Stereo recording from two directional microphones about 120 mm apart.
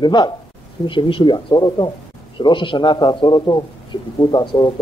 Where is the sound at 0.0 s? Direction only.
40° left (ahead or behind).